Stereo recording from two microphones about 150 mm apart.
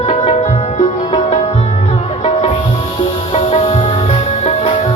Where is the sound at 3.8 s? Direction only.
35° left (ahead or behind).